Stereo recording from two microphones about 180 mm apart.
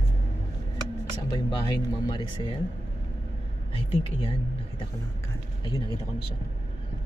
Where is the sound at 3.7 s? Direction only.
30° left (ahead or behind).